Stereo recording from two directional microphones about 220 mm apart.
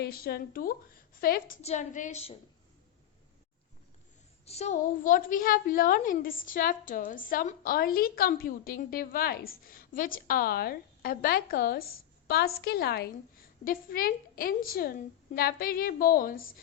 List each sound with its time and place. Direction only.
0.0 s speech: 45° left (ahead or behind)
1.6 s a woman's voice: 30° left (ahead or behind)
4.4 s a woman's voice: 30° left (ahead or behind)